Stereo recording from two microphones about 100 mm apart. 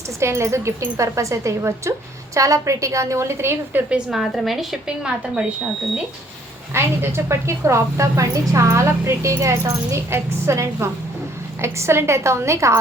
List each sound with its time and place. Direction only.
0.2 s a woman's voice: 30° right (ahead or behind); by 5.5 s 10° right (ahead or behind)
6.7 s a woman's voice: 25° right (ahead or behind)